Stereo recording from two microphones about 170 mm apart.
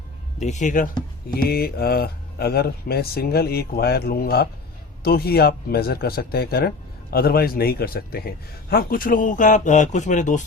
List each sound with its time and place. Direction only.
0.3 s speech: 45° left (ahead or behind)
1.3 s speech: 60° left (ahead or behind); by 10.4 s 45° left (ahead or behind)